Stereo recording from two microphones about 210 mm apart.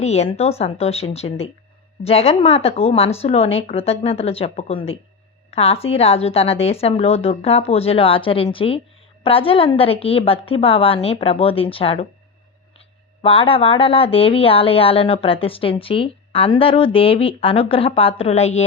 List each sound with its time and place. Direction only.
0.0 s speech: 30° left (ahead or behind)
13.2 s speech: 25° left (ahead or behind)